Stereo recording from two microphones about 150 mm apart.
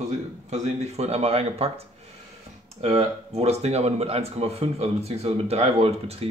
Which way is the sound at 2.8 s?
45° right (ahead or behind).